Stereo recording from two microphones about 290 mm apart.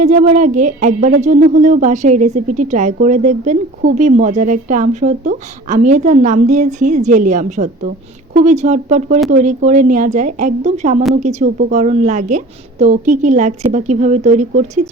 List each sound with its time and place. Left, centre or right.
0.0 s speech: right